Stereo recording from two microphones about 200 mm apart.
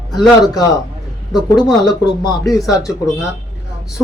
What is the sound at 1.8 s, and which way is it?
Speech, 20° left (ahead or behind).